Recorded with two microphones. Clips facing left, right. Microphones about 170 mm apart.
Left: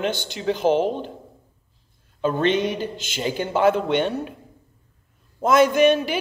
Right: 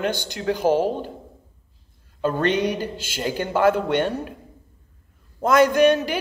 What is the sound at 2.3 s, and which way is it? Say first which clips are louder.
Speech: left 1 dB; 10° right (ahead or behind).